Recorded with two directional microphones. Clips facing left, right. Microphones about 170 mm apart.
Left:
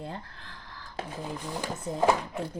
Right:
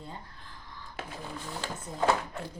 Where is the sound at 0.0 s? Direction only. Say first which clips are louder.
Left 5 dB; 80° left.